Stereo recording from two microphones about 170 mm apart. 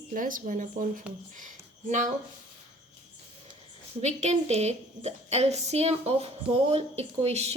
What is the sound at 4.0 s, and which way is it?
A woman's voice, 40° right (ahead or behind).